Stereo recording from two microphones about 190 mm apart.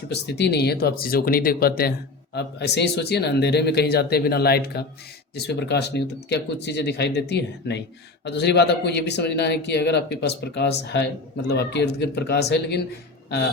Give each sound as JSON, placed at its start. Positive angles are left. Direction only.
{"t": 0.1, "sound": "speech", "side_deg": 60}